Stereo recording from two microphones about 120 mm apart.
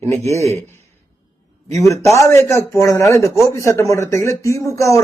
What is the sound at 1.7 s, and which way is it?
Speech, 25° left (ahead or behind).